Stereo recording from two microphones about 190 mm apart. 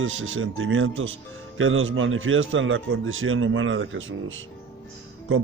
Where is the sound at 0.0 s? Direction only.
90° right.